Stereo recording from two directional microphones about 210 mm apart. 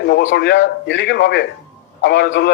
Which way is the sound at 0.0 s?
60° left (ahead or behind).